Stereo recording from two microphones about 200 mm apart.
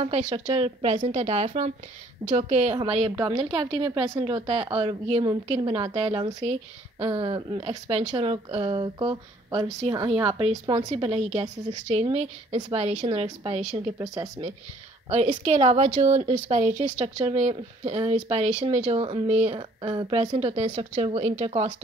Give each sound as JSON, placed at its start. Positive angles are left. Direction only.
{"t": 0.0, "sound": "speech", "side_deg": -30}
{"t": 13.9, "sound": "speech", "side_deg": -15}
{"t": 15.0, "sound": "speech", "side_deg": -35}